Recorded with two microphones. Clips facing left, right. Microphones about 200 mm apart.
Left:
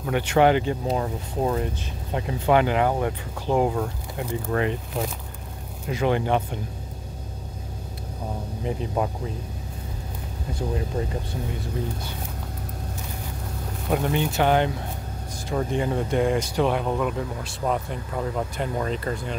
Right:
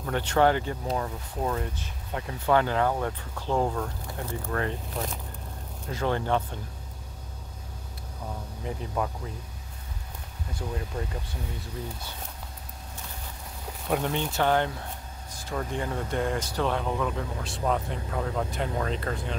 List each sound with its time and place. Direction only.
0.0 s speech: 10° left (ahead or behind)
8.6 s speech: 20° left (ahead or behind)
13.8 s speech: 5° left (ahead or behind)